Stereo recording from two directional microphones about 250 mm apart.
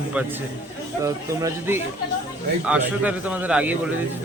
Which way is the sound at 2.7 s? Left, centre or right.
Centre.